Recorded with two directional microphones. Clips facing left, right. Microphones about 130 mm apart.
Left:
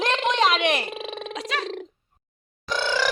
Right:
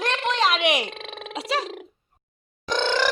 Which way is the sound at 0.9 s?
Centre (ahead or behind).